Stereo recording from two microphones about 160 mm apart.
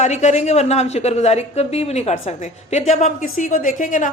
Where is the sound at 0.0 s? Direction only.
45° left (ahead or behind).